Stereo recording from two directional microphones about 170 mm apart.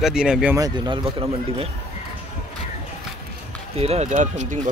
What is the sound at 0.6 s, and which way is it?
Speech, 25° right (ahead or behind).